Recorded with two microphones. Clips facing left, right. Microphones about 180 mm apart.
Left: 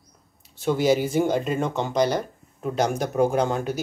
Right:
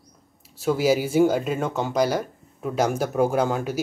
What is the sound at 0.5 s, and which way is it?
Speech, 5° right (ahead or behind).